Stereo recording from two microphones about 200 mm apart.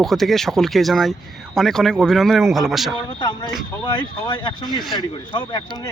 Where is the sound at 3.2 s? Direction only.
20° left (ahead or behind).